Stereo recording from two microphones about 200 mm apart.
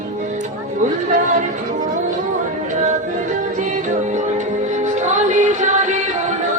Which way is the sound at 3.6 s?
40° right (ahead or behind).